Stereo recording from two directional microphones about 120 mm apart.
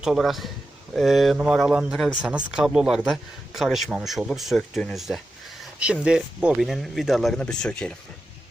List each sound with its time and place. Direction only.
0.0 s a man's voice: 5° right (ahead or behind)
5.8 s a man's voice: 10° right (ahead or behind); by 7.9 s 10° left (ahead or behind)